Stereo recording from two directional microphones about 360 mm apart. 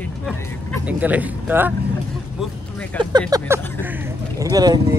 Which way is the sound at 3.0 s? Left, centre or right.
Centre.